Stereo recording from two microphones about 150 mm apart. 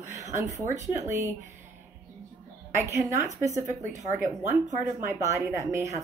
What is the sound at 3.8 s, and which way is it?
Speech, 50° right (ahead or behind).